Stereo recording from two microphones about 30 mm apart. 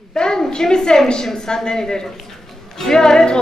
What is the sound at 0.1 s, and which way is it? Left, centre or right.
A woman's voice, left.